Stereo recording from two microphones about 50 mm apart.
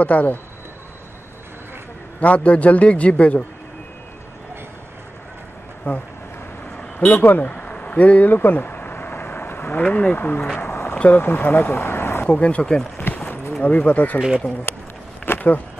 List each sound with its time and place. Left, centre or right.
0.0 s a man's voice: left
2.1 s a man's voice: left
5.9 s speech: left
6.8 s vehicle: left
8.3 s a sound: left
9.8 s a man's voice: left
10.1 s speech: left
10.6 s a sound: left
11.1 s speech: left
12.3 s a man's voice: left
15.2 s insect: left